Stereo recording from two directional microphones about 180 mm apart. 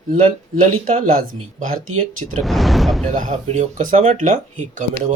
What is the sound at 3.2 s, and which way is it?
Speech, 45° right (ahead or behind).